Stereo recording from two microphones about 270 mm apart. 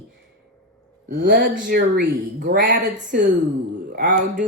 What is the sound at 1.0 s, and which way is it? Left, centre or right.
Speech, right.